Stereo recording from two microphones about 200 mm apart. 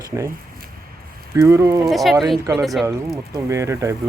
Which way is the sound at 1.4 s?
15° right (ahead or behind).